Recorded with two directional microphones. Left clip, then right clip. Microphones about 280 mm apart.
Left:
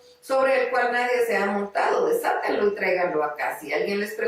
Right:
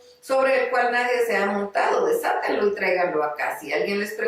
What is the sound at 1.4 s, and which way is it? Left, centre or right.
Speech, centre.